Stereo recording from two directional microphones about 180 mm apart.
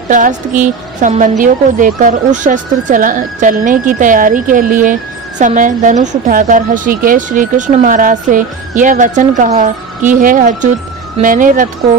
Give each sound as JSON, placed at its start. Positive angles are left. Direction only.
{"t": 0.1, "sound": "speech", "side_deg": -45}